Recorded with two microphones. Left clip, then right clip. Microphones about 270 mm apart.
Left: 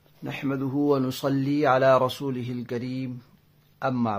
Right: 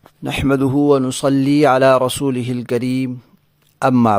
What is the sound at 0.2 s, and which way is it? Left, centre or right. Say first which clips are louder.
Speech: right 13 dB; right.